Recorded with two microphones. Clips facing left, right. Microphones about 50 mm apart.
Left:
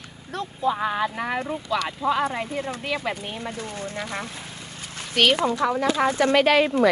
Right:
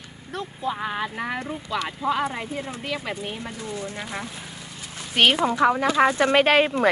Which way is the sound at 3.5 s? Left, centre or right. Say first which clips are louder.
Even; left.